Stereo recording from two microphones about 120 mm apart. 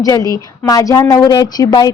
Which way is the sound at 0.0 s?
30° left (ahead or behind).